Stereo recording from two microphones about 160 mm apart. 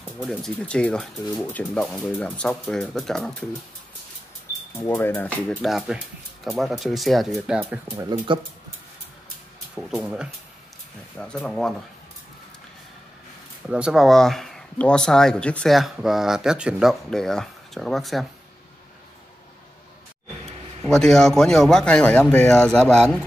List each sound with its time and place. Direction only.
0.2 s speech: 5° left (ahead or behind)
4.7 s speech: 15° left (ahead or behind)
5.7 s speech: centre (ahead or behind)
8.0 s speech: 25° right (ahead or behind)
9.8 s speech: 5° right (ahead or behind)
13.7 s speech: 5° right (ahead or behind)
20.9 s speech: 5° left (ahead or behind)